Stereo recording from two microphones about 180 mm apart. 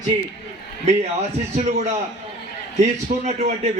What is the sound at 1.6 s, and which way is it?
A man's voice, 40° right (ahead or behind).